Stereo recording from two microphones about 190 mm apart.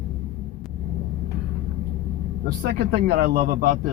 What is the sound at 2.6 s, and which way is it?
Speech, 60° right (ahead or behind).